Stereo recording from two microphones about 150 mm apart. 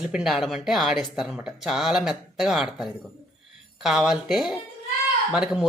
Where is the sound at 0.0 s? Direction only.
5° right (ahead or behind).